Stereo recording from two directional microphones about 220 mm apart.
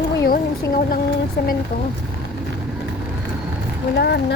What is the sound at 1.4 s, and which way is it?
Speech, 45° left (ahead or behind).